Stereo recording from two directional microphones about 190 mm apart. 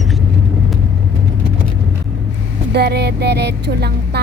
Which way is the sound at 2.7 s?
60° right (ahead or behind).